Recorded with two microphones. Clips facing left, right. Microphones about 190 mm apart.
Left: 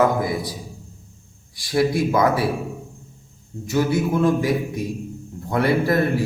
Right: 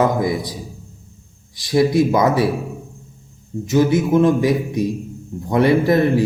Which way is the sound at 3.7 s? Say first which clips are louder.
Right 5 dB; 20° right (ahead or behind).